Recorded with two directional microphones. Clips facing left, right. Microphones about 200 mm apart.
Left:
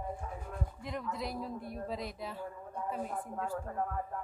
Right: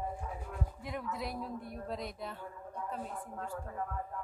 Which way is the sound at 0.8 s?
5° right (ahead or behind).